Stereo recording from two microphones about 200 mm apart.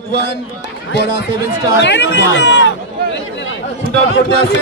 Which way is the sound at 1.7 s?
60° left (ahead or behind).